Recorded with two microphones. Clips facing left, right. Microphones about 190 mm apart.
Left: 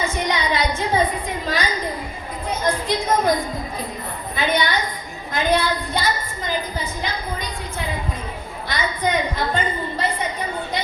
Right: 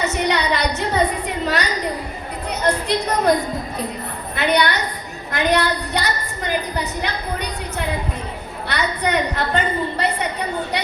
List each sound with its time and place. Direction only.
0.0 s a woman's voice: 70° right (ahead or behind)
1.5 s a sound: 70° right (ahead or behind)
2.5 s a woman's voice: 70° right (ahead or behind)
4.4 s a woman's voice: 70° right (ahead or behind)